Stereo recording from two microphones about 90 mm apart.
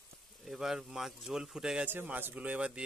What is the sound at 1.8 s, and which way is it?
Speech, 20° right (ahead or behind).